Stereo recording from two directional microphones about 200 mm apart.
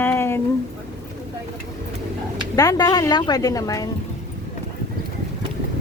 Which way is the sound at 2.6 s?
20° left (ahead or behind).